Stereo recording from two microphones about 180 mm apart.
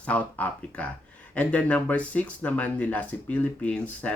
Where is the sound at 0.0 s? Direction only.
10° left (ahead or behind).